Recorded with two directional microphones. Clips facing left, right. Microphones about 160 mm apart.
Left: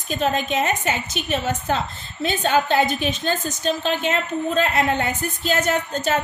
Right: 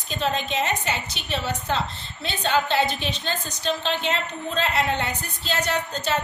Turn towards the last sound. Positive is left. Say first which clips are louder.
# left 4 dB
turn(degrees=50)  # may be behind; listen again after turning